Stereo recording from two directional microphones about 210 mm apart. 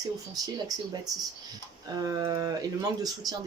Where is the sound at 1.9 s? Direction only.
20° right (ahead or behind).